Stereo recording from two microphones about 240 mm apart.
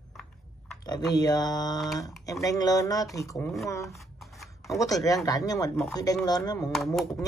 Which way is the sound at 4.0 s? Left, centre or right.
Centre.